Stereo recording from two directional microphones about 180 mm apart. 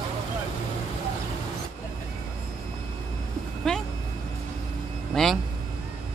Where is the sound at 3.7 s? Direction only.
5° left (ahead or behind).